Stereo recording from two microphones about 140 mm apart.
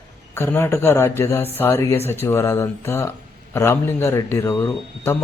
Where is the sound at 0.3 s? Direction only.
15° left (ahead or behind).